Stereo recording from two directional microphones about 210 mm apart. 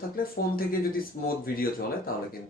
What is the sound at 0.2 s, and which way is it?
Speech, 45° left (ahead or behind).